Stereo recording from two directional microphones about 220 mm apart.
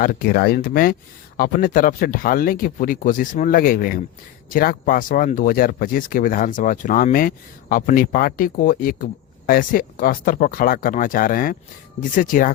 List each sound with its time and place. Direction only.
0.0 s speech: 40° left (ahead or behind)